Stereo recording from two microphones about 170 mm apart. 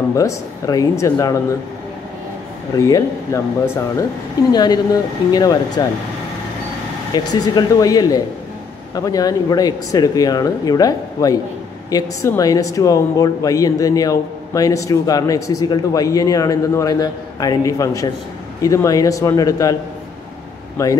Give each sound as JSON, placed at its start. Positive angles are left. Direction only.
{"t": 0.1, "sound": "speech", "side_deg": 20}
{"t": 2.7, "sound": "speech", "side_deg": 20}
{"t": 7.2, "sound": "speech", "side_deg": 25}